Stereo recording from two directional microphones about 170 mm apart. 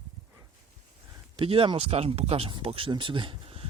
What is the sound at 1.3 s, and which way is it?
Speech, 30° right (ahead or behind).